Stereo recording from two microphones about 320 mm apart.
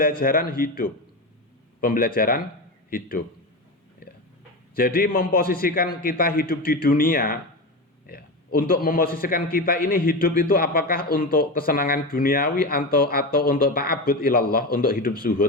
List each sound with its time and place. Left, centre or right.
0.0 s a man's voice: left
4.7 s a man's voice: left